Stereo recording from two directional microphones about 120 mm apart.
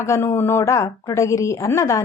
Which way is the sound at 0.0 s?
25° left (ahead or behind).